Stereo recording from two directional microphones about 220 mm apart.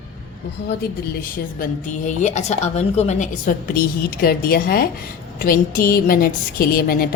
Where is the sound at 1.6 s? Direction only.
35° left (ahead or behind).